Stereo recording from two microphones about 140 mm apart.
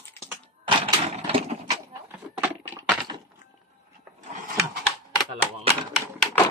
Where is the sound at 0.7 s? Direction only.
40° right (ahead or behind).